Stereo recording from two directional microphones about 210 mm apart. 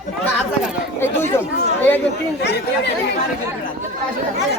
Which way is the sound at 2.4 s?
55° left (ahead or behind).